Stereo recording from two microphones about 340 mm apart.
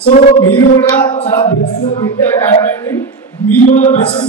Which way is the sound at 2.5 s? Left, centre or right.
Centre.